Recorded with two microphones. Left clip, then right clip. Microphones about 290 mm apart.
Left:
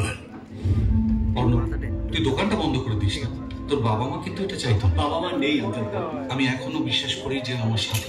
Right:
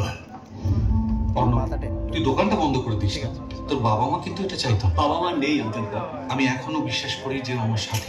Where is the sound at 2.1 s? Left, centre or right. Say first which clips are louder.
Right 2 dB; centre.